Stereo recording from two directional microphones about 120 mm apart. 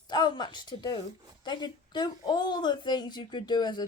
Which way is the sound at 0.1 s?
40° left (ahead or behind).